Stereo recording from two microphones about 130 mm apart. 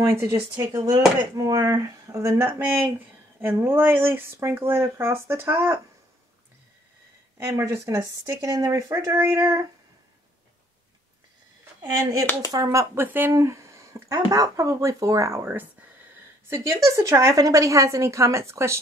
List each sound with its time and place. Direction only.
0.0 s speech: 20° right (ahead or behind)
7.3 s speech: 20° right (ahead or behind)
11.8 s speech: 25° right (ahead or behind)